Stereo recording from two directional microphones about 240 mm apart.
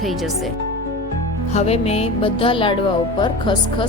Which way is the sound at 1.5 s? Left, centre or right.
Left.